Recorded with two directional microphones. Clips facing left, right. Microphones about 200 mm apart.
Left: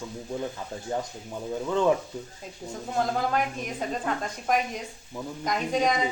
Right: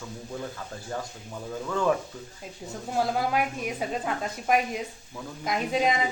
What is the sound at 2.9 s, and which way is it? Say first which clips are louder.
A woman's voice: even; 5° right (ahead or behind).